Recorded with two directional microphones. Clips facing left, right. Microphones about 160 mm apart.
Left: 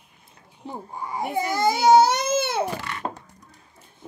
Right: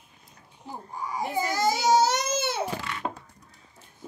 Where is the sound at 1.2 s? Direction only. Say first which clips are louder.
Left 3 dB; 60° left (ahead or behind).